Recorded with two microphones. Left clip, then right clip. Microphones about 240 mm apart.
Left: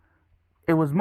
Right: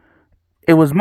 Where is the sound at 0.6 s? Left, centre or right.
Right.